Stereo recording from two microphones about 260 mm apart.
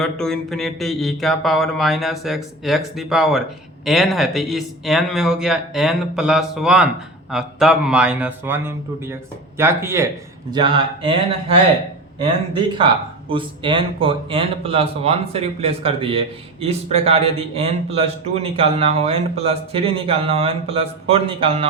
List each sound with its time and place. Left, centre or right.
0.0 s speech: centre
12.5 s speech: centre